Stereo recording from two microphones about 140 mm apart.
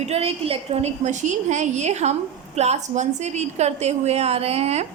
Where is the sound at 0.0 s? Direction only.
45° right (ahead or behind).